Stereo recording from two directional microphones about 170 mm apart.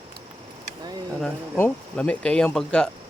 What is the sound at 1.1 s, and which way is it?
Speech, 5° left (ahead or behind).